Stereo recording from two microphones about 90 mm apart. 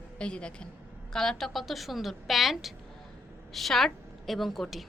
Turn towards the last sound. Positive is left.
turn(degrees=0)  # may be behind; listen again after turning